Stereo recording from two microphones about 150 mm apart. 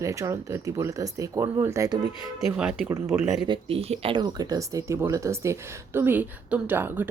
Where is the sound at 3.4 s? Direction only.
35° right (ahead or behind); by 7.1 s 15° right (ahead or behind).